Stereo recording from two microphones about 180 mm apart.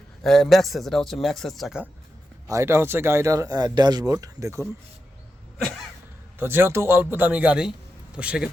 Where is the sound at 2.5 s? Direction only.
15° right (ahead or behind).